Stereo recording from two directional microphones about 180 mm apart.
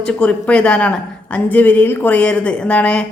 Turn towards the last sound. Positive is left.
turn(degrees=5)  # may be behind; listen again after turning